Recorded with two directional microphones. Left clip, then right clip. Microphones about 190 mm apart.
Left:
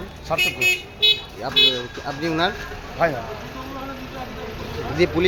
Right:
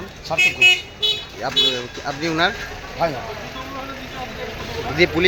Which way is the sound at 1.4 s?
5° left (ahead or behind).